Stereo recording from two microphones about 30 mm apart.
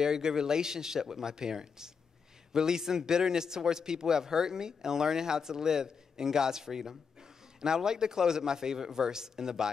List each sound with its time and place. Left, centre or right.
0.0 s a man's voice: centre